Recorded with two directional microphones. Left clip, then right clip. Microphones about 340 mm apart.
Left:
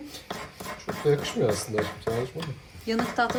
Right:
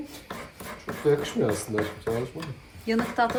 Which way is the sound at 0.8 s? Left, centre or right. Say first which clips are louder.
Right 1 dB; centre.